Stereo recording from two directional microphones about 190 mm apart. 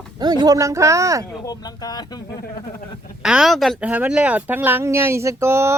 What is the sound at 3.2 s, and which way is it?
Speech, centre (ahead or behind).